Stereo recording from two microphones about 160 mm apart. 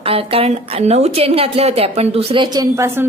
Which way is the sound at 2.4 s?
25° right (ahead or behind).